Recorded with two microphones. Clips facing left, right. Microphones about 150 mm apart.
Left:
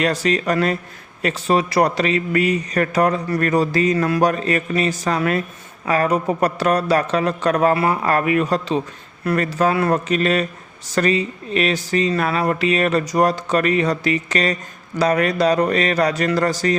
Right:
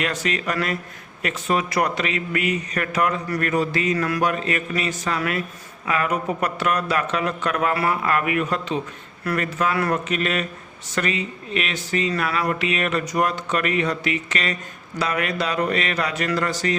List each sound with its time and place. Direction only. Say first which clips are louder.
0.0 s speech: left 6 dB; 35° left (ahead or behind)
4.2 s speech: left 5 dB; 40° left (ahead or behind)